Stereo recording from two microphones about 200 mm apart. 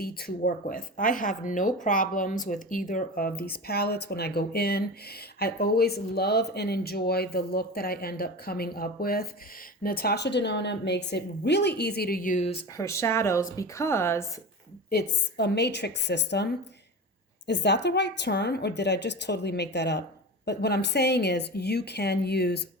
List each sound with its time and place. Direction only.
0.0 s a woman's voice: 50° left (ahead or behind); by 12.6 s 30° left (ahead or behind)
12.7 s speech: 15° left (ahead or behind)
14.8 s a woman's voice: 55° left (ahead or behind)